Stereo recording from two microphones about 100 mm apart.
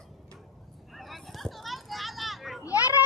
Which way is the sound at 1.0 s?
Centre (ahead or behind).